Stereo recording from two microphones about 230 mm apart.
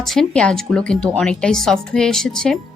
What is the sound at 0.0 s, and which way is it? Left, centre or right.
Speech, centre.